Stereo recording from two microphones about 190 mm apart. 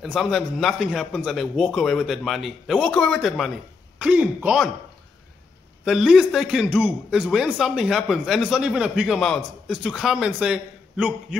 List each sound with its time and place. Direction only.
0.0 s a man's voice: centre (ahead or behind)
5.9 s a man's voice: centre (ahead or behind)